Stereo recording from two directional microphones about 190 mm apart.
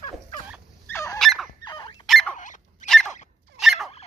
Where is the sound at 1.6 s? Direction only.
25° left (ahead or behind).